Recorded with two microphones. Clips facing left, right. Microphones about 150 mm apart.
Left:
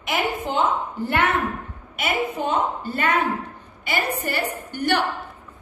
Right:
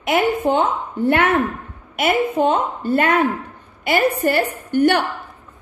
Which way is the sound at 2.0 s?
55° right (ahead or behind).